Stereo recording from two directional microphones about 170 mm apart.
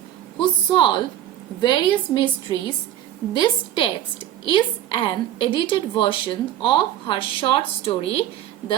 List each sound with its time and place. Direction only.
0.3 s a woman's voice: 30° left (ahead or behind)